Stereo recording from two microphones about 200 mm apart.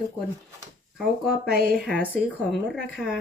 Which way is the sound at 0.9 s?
Centre (ahead or behind).